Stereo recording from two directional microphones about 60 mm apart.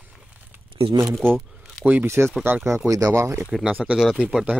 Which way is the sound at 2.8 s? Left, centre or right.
Right.